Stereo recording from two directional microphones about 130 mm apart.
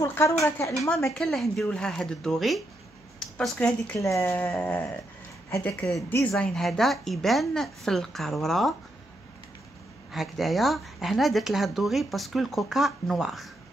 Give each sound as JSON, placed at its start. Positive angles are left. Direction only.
{"t": 0.0, "sound": "speech", "side_deg": 20}
{"t": 0.9, "sound": "speech", "side_deg": 5}
{"t": 4.0, "sound": "speech", "side_deg": 20}
{"t": 6.3, "sound": "speech", "side_deg": 5}
{"t": 10.1, "sound": "speech", "side_deg": 0}